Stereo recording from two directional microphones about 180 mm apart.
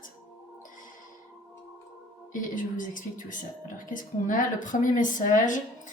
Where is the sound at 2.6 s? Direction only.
45° left (ahead or behind).